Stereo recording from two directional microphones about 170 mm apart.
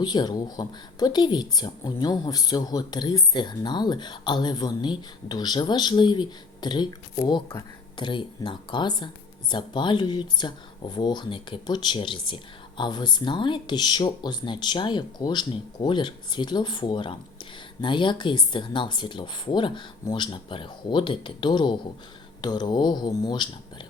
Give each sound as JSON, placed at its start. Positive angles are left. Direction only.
{"t": 0.0, "sound": "speech", "side_deg": 25}
{"t": 7.9, "sound": "speech", "side_deg": 30}